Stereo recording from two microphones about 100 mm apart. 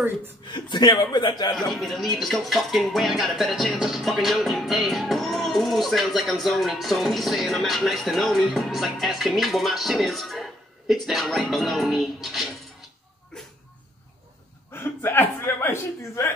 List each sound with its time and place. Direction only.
0.5 s a man's voice: 50° left (ahead or behind)
1.7 s speech: centre (ahead or behind)
14.7 s a man's voice: 25° left (ahead or behind)